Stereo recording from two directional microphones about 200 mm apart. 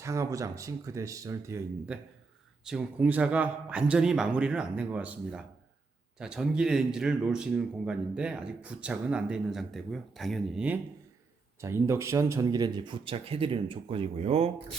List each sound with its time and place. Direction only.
0.0 s speech: 15° right (ahead or behind); by 14.5 s 35° right (ahead or behind)